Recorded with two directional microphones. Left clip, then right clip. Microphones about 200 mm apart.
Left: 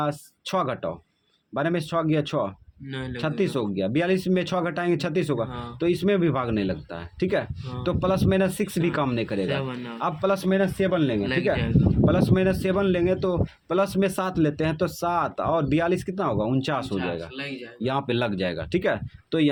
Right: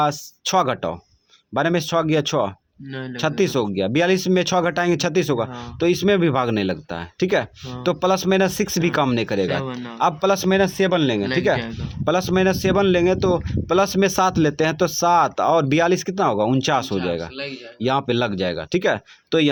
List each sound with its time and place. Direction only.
0.0 s speech: 35° right (ahead or behind)
2.9 s speech: 20° right (ahead or behind)
3.2 s speech: 35° right (ahead or behind)